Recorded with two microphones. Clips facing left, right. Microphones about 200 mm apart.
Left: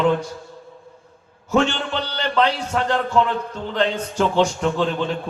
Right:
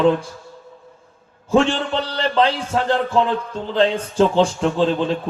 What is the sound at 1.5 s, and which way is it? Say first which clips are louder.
A man's voice: right 3 dB; 30° right (ahead or behind).